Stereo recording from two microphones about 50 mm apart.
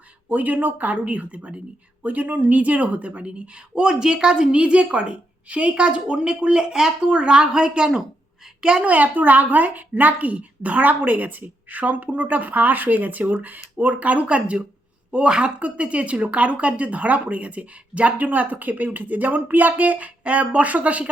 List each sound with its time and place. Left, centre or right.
0.3 s speech: right; by 8.0 s centre
8.8 s speech: right